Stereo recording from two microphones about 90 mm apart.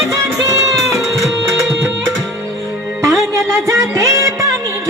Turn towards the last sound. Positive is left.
turn(degrees=-35)  # may be behind; listen again after turning